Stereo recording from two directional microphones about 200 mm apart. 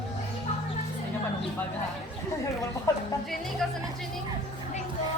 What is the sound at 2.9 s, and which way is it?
Speech, 15° left (ahead or behind).